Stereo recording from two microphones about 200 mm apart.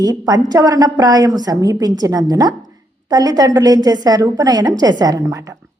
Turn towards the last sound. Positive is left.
turn(degrees=-15)  # may be behind; listen again after turning